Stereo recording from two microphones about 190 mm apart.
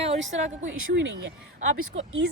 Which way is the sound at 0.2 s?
75° right (ahead or behind).